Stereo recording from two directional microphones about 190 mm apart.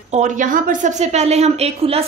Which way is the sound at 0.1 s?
40° right (ahead or behind).